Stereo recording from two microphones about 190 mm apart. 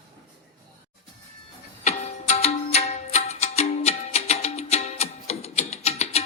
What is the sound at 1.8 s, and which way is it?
Music, 35° left (ahead or behind).